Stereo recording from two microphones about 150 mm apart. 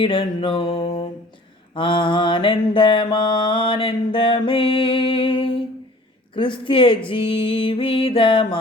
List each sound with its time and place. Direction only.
0.0 s mantra: 35° left (ahead or behind)